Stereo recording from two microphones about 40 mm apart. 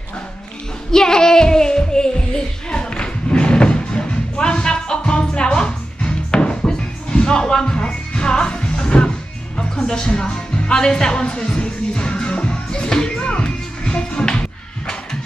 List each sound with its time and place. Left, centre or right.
0.9 s music: centre